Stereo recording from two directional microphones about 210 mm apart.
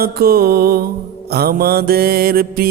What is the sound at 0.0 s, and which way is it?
Mantra, 45° right (ahead or behind).